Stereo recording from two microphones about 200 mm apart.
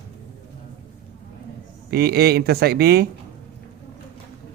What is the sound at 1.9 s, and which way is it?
A man's voice, 50° right (ahead or behind).